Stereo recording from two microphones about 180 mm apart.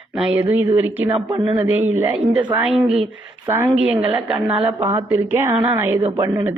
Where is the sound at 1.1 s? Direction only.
30° right (ahead or behind).